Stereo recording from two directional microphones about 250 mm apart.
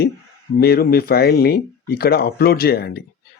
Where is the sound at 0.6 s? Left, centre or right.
Left.